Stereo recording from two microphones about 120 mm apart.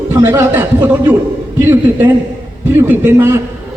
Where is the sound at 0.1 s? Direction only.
20° right (ahead or behind).